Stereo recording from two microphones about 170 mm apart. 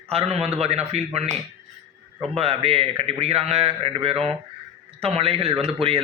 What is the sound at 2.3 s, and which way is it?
A man's voice, 35° right (ahead or behind).